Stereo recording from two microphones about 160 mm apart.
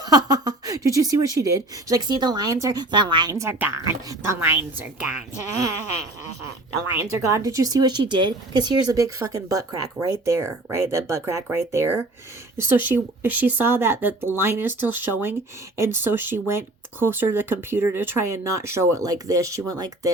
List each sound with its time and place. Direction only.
0.0 s a woman's voice: 25° right (ahead or behind)
7.3 s a woman's voice: 20° right (ahead or behind)